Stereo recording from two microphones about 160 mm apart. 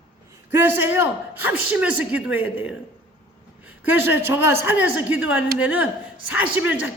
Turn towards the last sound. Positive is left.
turn(degrees=-10)  # may be behind; listen again after turning